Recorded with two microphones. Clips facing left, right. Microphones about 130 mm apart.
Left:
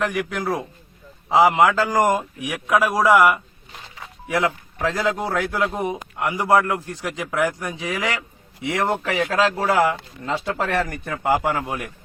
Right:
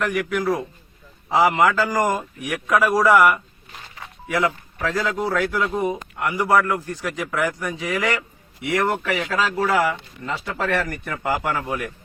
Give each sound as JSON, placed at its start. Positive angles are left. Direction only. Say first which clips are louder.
{"t": 1.3, "sound": "a man's voice", "louder": "left 2 dB", "side_deg": 20}